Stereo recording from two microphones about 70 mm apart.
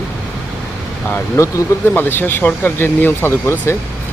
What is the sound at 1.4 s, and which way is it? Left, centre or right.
Speech, left.